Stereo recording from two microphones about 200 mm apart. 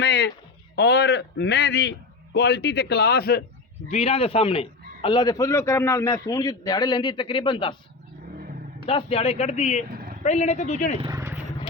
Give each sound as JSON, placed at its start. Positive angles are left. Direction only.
{"t": 0.0, "sound": "a sound", "side_deg": 55}
{"t": 0.8, "sound": "a man's voice", "side_deg": 55}
{"t": 3.8, "sound": "a man's voice", "side_deg": 30}
{"t": 8.9, "sound": "speech", "side_deg": 30}
{"t": 9.9, "sound": "vehicle", "side_deg": -45}
{"t": 10.2, "sound": "speech", "side_deg": 35}
{"t": 11.0, "sound": "speech", "side_deg": -15}